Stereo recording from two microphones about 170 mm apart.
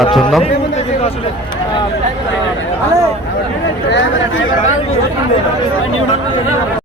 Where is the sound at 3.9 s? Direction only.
90° left.